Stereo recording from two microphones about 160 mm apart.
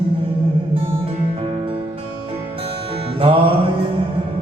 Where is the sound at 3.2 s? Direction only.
35° right (ahead or behind).